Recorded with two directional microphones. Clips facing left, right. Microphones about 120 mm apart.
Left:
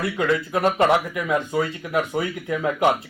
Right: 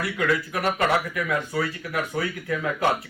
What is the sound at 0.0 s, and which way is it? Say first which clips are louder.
A man's voice: left 3 dB; 25° left (ahead or behind).